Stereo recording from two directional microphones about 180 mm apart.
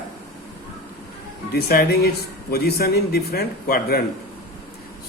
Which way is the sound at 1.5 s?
60° left (ahead or behind).